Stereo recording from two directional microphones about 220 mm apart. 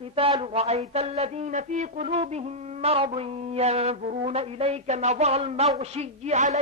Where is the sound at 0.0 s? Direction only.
25° right (ahead or behind).